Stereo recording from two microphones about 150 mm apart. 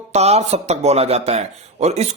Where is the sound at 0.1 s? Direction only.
45° right (ahead or behind).